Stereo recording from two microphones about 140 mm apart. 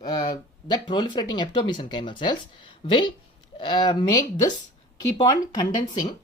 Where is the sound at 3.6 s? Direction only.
30° left (ahead or behind).